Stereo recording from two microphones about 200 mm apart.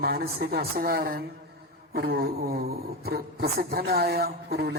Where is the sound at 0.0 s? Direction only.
50° right (ahead or behind).